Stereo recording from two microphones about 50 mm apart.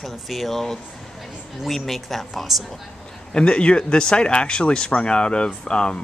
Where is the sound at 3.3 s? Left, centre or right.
Left.